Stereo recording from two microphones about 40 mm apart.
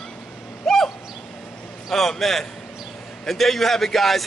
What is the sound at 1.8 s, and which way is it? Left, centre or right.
A man's voice, centre.